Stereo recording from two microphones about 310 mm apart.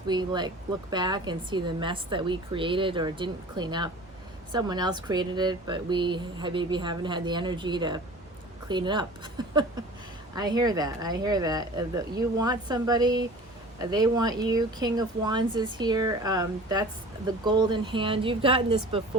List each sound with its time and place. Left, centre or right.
0.1 s speech: centre
9.4 s a sound: centre
10.3 s speech: centre